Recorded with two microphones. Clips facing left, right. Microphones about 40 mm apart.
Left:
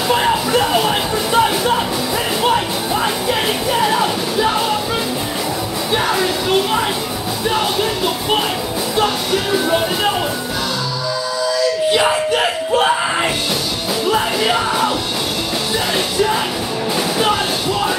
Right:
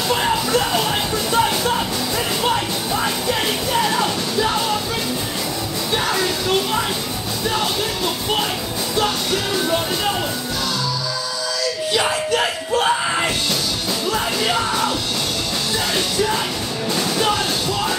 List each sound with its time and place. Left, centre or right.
0.1 s music: centre
3.3 s music: centre
6.0 s music: centre
11.9 s yell: left
14.1 s music: centre